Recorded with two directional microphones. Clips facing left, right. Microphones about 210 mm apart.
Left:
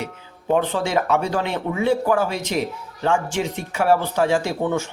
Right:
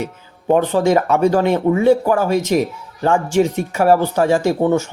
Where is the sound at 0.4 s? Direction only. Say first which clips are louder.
Right 6 dB; 45° right (ahead or behind).